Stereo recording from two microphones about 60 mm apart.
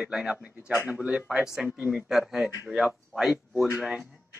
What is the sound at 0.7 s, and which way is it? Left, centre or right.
Speech, right.